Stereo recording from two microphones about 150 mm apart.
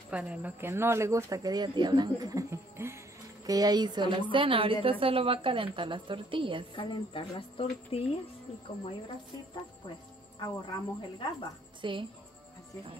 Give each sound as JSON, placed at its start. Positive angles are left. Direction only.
{"t": 0.1, "sound": "a woman's voice", "side_deg": -10}
{"t": 6.7, "sound": "speech", "side_deg": 35}
{"t": 10.4, "sound": "speech", "side_deg": 30}
{"t": 11.8, "sound": "a woman's voice", "side_deg": -35}